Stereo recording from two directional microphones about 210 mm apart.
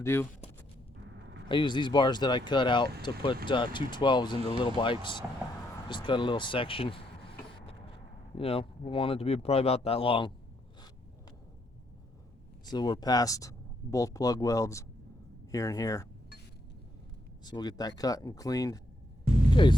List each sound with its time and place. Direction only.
0.0 s speech: 10° left (ahead or behind)
1.5 s speech: 20° left (ahead or behind)
12.7 s speech: 20° left (ahead or behind)
17.4 s speech: 20° left (ahead or behind)